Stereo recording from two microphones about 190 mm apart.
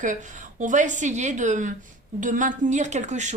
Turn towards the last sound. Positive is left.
turn(degrees=-40)  # may be behind; listen again after turning